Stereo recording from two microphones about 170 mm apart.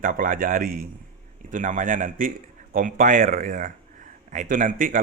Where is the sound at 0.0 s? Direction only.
55° right (ahead or behind).